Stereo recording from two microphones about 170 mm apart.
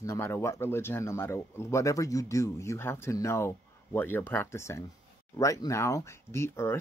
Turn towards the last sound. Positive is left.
turn(degrees=15)  # may be behind; listen again after turning